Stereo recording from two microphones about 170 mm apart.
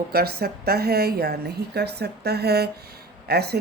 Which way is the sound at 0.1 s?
65° right (ahead or behind).